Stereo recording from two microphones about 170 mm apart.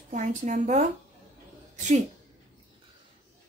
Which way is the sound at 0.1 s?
45° right (ahead or behind).